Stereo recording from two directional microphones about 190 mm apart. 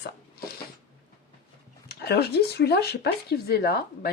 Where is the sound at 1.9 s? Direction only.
55° left (ahead or behind).